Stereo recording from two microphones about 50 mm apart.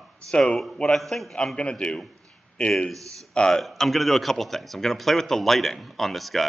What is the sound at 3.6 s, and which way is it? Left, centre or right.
A man's voice, centre.